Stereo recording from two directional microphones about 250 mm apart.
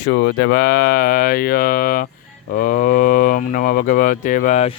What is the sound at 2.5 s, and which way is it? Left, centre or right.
Speech, left.